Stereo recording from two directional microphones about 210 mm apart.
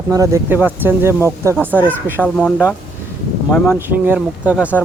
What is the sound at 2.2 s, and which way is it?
Speech, 5° left (ahead or behind).